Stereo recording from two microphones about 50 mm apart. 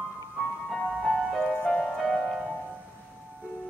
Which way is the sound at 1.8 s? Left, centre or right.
Centre.